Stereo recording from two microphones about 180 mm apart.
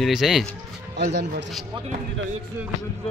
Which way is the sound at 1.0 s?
60° right (ahead or behind).